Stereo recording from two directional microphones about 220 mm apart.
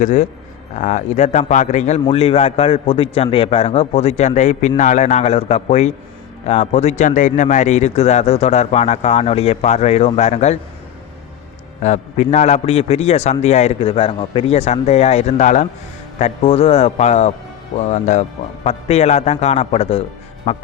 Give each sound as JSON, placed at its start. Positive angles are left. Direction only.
{"t": 0.0, "sound": "speech", "side_deg": 35}
{"t": 11.8, "sound": "speech", "side_deg": 30}